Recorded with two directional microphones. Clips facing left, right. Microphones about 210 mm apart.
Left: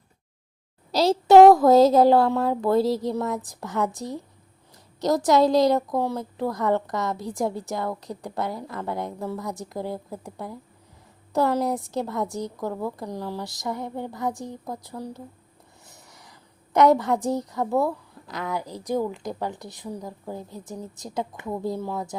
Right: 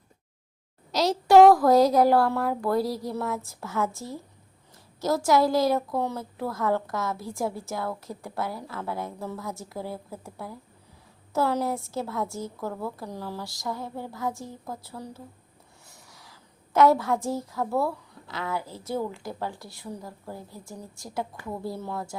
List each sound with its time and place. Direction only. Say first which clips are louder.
0.9 s a woman's voice: left 4 dB; 30° left (ahead or behind); by 22.1 s 15° left (ahead or behind)